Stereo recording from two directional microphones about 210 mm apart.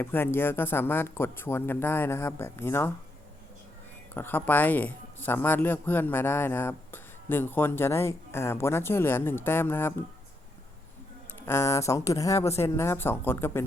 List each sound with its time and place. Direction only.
0.0 s speech: 10° left (ahead or behind)
4.1 s speech: 10° left (ahead or behind)
11.3 s speech: 10° left (ahead or behind)